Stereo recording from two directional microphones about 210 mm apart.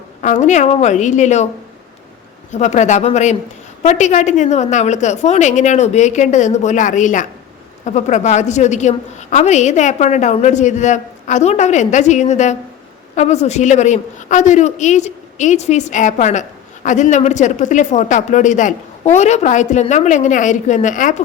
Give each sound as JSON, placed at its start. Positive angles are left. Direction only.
{"t": 0.2, "sound": "a woman's voice", "side_deg": 35}
{"t": 2.5, "sound": "a woman's voice", "side_deg": 35}